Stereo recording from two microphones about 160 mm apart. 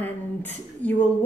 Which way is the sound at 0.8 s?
10° left (ahead or behind).